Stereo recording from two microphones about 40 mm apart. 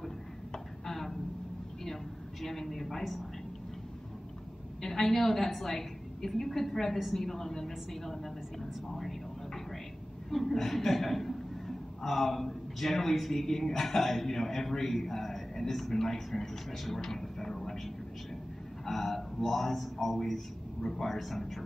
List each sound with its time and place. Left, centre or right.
0.5 s a sound: centre
2.4 s a woman's voice: centre
4.8 s a woman's voice: centre
10.3 s a man's voice: centre